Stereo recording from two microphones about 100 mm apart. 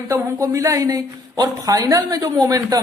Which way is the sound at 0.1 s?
30° right (ahead or behind).